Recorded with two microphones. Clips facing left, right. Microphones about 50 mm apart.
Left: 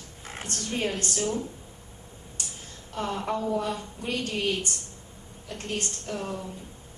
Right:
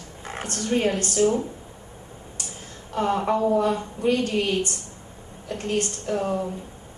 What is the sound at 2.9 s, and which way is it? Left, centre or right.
Speech, right.